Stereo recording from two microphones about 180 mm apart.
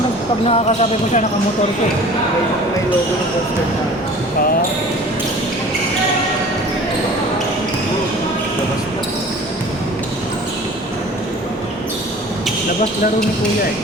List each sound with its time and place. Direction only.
0.4 s speech: 35° left (ahead or behind)